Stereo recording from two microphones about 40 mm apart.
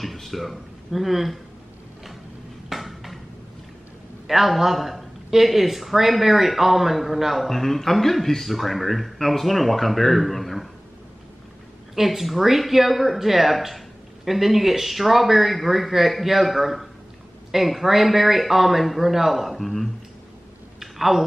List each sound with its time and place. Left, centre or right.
0.0 s speech: centre
2.7 s dishes: centre
4.3 s speech: centre
11.9 s speech: centre
20.8 s a sound: centre